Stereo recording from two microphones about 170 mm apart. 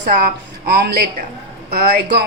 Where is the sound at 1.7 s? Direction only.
60° right (ahead or behind).